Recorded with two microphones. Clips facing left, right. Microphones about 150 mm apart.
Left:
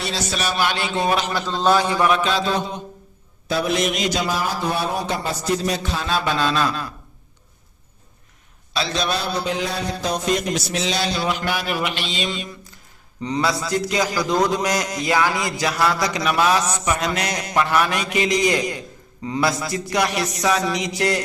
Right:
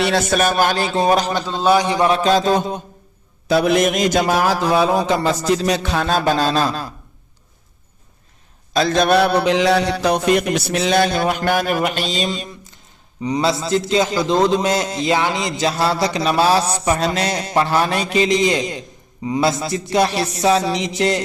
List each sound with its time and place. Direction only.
0.0 s a man's voice: 55° right (ahead or behind); by 1.3 s 40° right (ahead or behind)
1.5 s a man's voice: 10° right (ahead or behind)
2.0 s a sound: 30° right (ahead or behind)
2.3 s a man's voice: 45° right (ahead or behind)
3.5 s a man's voice: 65° right (ahead or behind)
6.1 s a sound: 40° right (ahead or behind)
8.7 s mantra: 50° right (ahead or behind)
13.4 s a man's voice: 25° right (ahead or behind)